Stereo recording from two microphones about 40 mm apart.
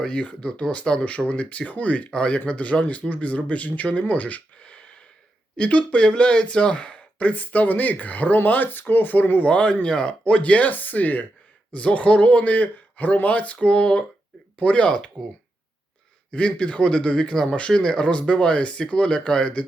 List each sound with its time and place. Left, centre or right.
0.1 s speech: left
2.0 s speech: left
9.5 s speech: left
11.7 s speech: left
16.3 s speech: left